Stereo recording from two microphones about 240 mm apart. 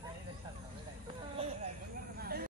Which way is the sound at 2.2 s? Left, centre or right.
Right.